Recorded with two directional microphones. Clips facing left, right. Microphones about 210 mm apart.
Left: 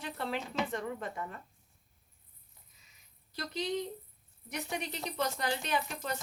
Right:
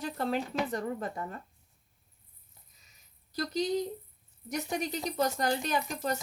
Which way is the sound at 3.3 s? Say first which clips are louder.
Right 5 dB; 40° right (ahead or behind).